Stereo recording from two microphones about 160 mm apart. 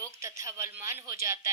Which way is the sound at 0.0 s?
20° right (ahead or behind).